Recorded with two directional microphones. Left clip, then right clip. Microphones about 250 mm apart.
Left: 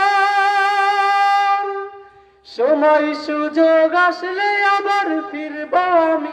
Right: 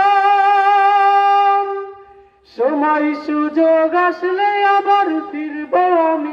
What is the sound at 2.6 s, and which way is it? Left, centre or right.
Music, left.